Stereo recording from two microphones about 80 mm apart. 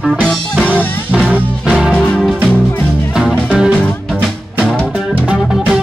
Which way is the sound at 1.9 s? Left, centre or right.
Centre.